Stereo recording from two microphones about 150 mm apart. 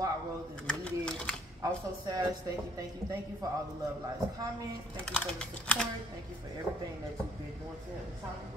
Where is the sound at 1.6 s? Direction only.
25° right (ahead or behind).